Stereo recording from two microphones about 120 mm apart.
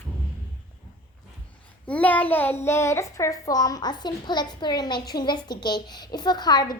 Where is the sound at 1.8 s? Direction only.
10° left (ahead or behind).